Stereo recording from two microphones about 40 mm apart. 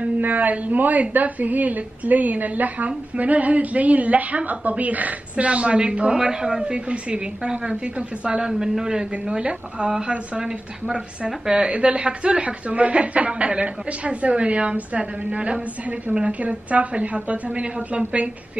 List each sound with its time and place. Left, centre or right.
0.2 s a woman's voice: right; by 6.6 s centre
6.6 s a woman's voice: right
11.5 s a woman's voice: right